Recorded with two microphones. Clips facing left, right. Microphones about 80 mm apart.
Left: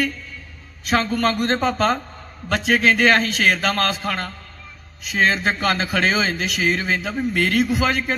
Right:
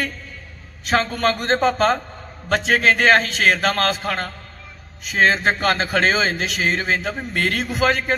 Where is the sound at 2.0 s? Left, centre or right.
Right.